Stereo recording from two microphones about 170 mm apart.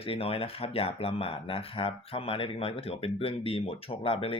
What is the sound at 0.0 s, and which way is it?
Speech, 35° left (ahead or behind).